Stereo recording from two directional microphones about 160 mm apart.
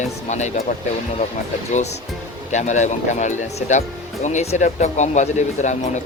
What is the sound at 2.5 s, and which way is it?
Speech, 50° left (ahead or behind).